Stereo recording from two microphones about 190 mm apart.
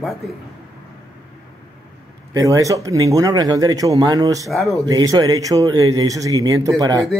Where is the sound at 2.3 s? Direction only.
15° right (ahead or behind).